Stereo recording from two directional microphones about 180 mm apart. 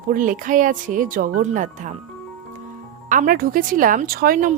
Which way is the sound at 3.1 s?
50° right (ahead or behind).